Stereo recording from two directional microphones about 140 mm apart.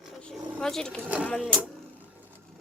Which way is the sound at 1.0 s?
10° right (ahead or behind).